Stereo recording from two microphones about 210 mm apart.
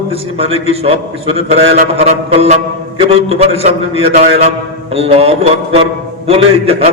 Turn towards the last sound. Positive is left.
turn(degrees=-30)  # may be behind; listen again after turning